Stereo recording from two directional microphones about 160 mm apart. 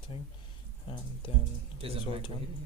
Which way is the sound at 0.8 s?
30° left (ahead or behind).